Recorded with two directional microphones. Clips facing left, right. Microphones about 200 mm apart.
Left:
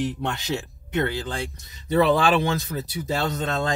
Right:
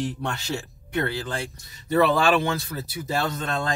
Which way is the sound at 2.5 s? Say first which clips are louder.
Left 2 dB; 20° left (ahead or behind).